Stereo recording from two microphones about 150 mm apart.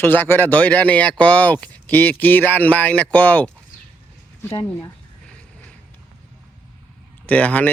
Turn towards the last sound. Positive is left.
turn(degrees=10)  # may be behind; listen again after turning